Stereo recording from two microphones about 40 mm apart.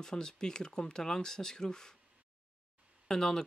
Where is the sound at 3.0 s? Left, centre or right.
Centre.